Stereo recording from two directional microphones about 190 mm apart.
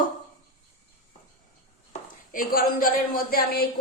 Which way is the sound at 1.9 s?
45° left (ahead or behind).